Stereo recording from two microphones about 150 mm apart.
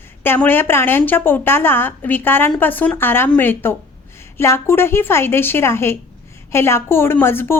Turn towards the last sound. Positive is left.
turn(degrees=15)  # may be behind; listen again after turning